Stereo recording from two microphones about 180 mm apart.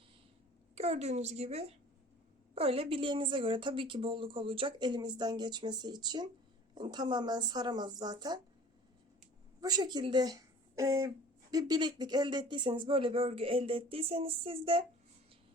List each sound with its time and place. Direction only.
0.8 s a woman's voice: 35° right (ahead or behind)
9.6 s a woman's voice: 20° right (ahead or behind)